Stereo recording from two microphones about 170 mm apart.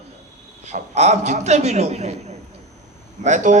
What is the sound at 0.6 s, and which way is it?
A man's voice, 40° right (ahead or behind).